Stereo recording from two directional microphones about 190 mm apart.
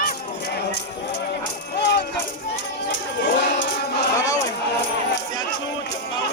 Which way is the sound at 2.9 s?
70° left (ahead or behind).